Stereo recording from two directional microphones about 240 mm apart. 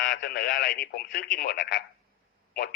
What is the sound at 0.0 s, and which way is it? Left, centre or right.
Speech, left.